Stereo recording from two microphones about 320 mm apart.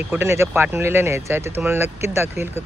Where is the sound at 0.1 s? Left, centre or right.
Centre.